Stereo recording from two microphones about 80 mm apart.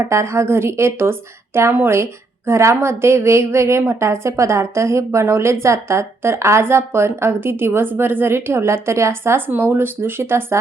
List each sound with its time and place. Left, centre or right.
0.0 s a woman's voice: right